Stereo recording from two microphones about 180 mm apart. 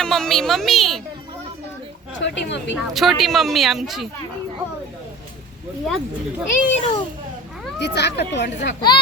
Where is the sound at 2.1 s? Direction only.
85° left.